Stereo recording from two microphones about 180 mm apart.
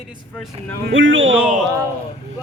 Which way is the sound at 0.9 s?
90° right.